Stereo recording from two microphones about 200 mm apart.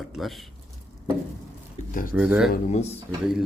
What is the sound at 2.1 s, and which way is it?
Speech, 5° right (ahead or behind).